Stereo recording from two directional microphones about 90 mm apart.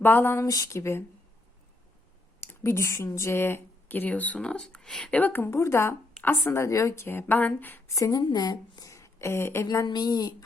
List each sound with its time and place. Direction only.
0.0 s a woman's voice: 25° left (ahead or behind)
0.4 s speech: 40° left (ahead or behind)
2.4 s speech: 30° left (ahead or behind); by 5.1 s 5° left (ahead or behind)
5.1 s a woman's voice: 20° left (ahead or behind)
7.9 s speech: 40° left (ahead or behind)
8.2 s a woman's voice: 50° left (ahead or behind); by 9.6 s 30° left (ahead or behind)
9.8 s speech: 50° left (ahead or behind)